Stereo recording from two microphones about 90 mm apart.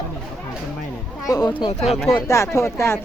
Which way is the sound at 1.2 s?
40° left (ahead or behind).